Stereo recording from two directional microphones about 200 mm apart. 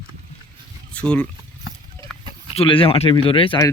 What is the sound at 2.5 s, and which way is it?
Speech, 25° left (ahead or behind).